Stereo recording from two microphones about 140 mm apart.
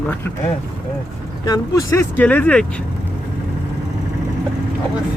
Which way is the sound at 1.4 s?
25° left (ahead or behind).